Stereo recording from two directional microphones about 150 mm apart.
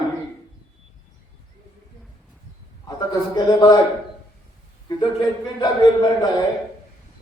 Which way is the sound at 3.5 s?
30° left (ahead or behind).